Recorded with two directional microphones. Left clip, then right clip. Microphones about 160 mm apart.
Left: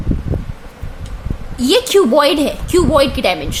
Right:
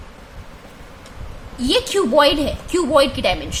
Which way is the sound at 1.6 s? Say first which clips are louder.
Left 6 dB; 30° left (ahead or behind).